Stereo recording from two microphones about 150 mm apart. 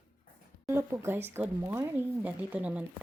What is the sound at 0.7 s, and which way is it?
Speech, 15° right (ahead or behind).